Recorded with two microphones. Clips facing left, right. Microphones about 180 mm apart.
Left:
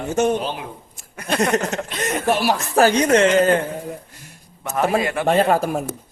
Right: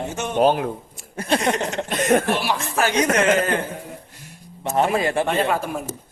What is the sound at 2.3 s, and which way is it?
Speech, 40° left (ahead or behind).